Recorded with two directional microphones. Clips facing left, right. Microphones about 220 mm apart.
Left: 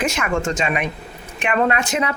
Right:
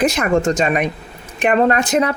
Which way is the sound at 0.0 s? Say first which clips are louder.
Right 6 dB; 35° right (ahead or behind).